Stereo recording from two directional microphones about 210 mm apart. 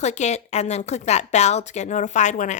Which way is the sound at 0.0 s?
30° left (ahead or behind).